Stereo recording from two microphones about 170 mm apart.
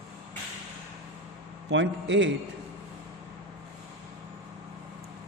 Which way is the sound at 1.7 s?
90° right.